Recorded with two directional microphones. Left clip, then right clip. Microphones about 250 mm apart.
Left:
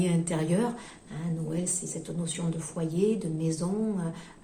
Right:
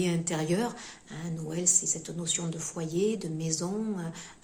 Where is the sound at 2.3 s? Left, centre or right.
Right.